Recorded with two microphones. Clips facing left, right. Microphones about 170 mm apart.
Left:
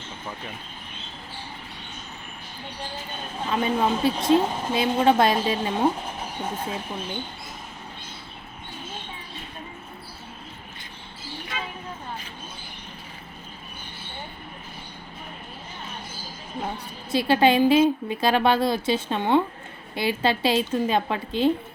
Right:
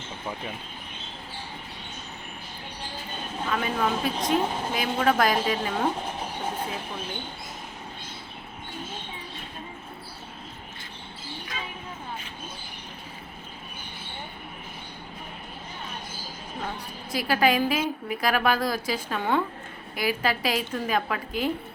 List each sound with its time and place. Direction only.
3.5 s a woman's voice: 25° left (ahead or behind)
16.6 s a woman's voice: 25° left (ahead or behind)